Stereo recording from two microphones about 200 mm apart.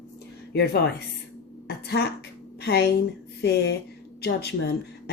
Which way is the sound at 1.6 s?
55° left (ahead or behind).